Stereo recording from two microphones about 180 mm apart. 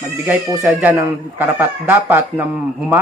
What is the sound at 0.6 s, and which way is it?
Speech, 10° right (ahead or behind).